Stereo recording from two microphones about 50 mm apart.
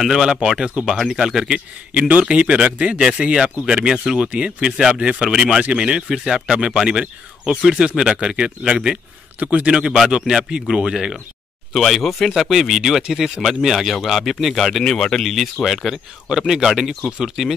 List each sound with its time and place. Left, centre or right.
0.0 s speech: centre
2.0 s speech: right
2.2 s speech: centre
9.4 s speech: right
9.9 s speech: centre
11.7 s speech: centre